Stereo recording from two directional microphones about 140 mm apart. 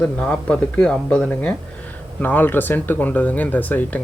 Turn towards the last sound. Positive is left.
turn(degrees=10)  # may be behind; listen again after turning